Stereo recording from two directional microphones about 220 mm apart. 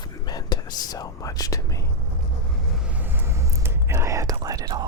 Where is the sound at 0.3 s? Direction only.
20° left (ahead or behind).